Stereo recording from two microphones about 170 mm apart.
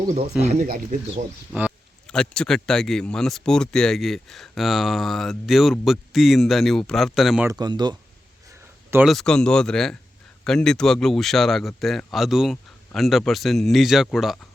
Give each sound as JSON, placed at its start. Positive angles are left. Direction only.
{"t": 0.4, "sound": "speech", "side_deg": -50}
{"t": 2.0, "sound": "speech", "side_deg": 5}
{"t": 7.4, "sound": "speech", "side_deg": -25}
{"t": 9.0, "sound": "speech", "side_deg": 5}